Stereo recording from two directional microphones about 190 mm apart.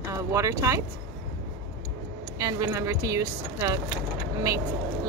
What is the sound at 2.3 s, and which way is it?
Speech, 15° right (ahead or behind).